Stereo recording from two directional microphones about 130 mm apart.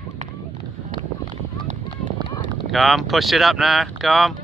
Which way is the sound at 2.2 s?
35° right (ahead or behind).